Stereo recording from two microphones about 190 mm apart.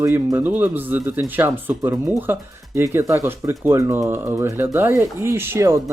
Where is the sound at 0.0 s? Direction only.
15° right (ahead or behind).